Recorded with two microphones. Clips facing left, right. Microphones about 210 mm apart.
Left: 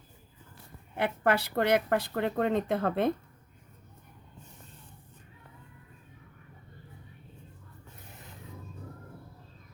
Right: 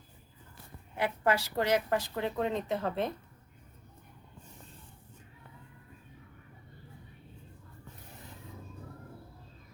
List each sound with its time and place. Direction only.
0.9 s speech: 60° left (ahead or behind)